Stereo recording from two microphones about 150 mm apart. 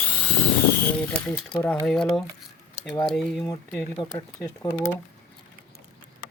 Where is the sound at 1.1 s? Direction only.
10° left (ahead or behind).